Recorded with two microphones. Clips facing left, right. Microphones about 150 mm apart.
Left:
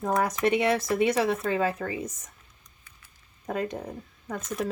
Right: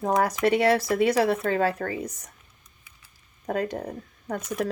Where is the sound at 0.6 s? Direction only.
35° right (ahead or behind).